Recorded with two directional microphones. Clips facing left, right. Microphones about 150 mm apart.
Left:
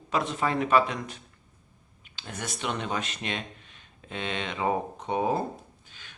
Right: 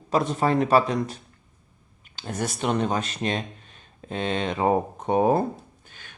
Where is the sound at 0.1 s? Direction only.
40° right (ahead or behind).